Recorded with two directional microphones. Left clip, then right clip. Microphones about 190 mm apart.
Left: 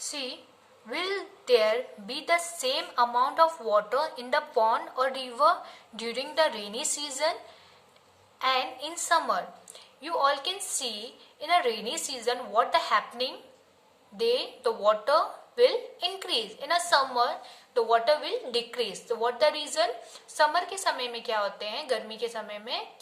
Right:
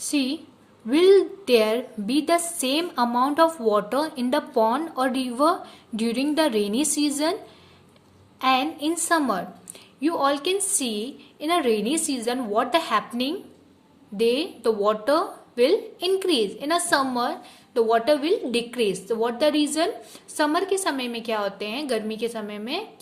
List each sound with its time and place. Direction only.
0.0 s a woman's voice: 40° right (ahead or behind)
8.4 s a woman's voice: 40° right (ahead or behind)